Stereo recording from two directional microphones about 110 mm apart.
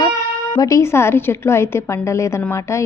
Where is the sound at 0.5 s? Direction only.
30° left (ahead or behind).